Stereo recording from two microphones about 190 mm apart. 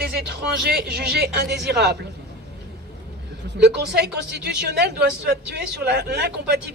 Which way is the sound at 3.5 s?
65° right (ahead or behind).